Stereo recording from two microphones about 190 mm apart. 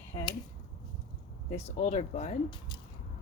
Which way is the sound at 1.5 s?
35° left (ahead or behind).